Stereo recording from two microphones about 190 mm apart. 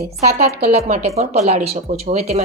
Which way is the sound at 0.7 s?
35° right (ahead or behind).